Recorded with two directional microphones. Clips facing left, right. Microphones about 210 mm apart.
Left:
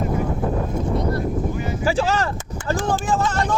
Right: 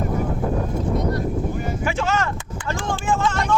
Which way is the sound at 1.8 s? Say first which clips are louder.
Left 4 dB; 35° left (ahead or behind).